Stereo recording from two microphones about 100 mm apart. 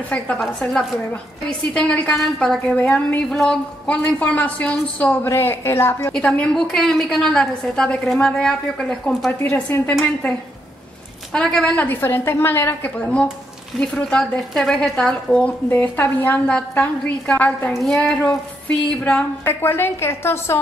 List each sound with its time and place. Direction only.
0.1 s a woman's voice: 10° left (ahead or behind)
5.2 s a woman's voice: 25° left (ahead or behind)
6.1 s a woman's voice: 10° left (ahead or behind)
9.4 s a woman's voice: 20° left (ahead or behind)
11.3 s a woman's voice: 5° left (ahead or behind)
15.7 s a woman's voice: 20° left (ahead or behind)
17.8 s a woman's voice: 5° left (ahead or behind)
19.0 s a woman's voice: 20° left (ahead or behind)